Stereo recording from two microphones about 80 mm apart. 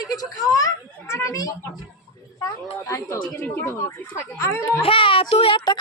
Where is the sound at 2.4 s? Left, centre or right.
Left.